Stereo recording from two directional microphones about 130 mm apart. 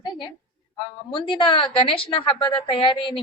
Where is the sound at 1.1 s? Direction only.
40° left (ahead or behind).